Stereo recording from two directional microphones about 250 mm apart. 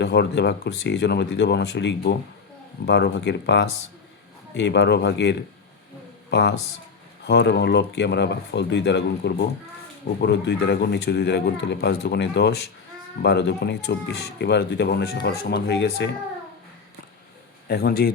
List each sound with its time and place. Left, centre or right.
0.0 s speech: left
7.3 s speech: left
17.7 s speech: left